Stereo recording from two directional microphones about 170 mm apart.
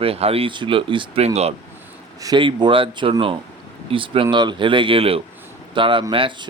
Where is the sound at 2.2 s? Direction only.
25° right (ahead or behind).